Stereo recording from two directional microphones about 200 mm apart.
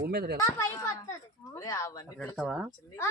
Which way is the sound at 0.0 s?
55° right (ahead or behind).